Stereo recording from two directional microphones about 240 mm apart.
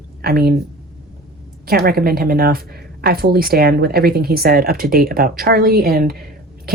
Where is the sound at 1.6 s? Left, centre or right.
Right.